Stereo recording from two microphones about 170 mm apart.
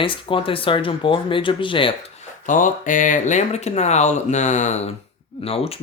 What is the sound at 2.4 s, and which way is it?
Speech, 50° left (ahead or behind).